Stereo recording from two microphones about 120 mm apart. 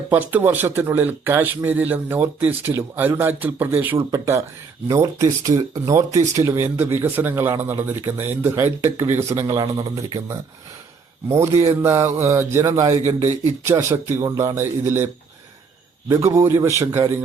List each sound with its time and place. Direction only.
0.1 s a man's voice: 15° right (ahead or behind)
16.0 s a man's voice: 25° right (ahead or behind)